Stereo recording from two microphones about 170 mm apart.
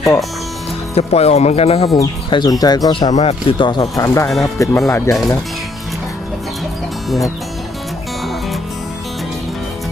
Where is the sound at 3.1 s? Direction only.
35° left (ahead or behind); by 4.7 s 20° left (ahead or behind).